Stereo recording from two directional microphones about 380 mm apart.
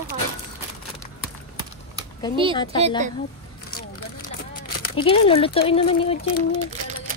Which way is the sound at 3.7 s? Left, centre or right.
Left.